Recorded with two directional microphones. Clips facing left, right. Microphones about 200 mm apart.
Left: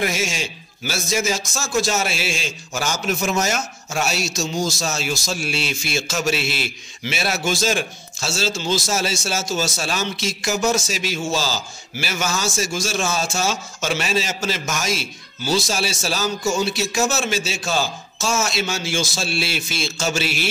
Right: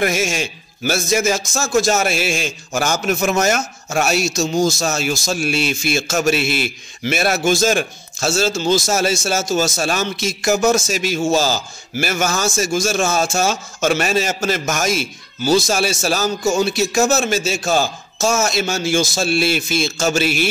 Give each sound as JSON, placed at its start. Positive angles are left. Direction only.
{"t": 0.0, "sound": "a man's voice", "side_deg": -50}